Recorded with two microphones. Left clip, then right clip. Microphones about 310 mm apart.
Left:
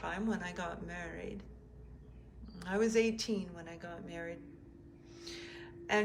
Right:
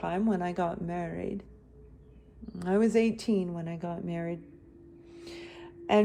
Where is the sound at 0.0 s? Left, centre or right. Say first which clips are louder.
Right 8 dB; centre.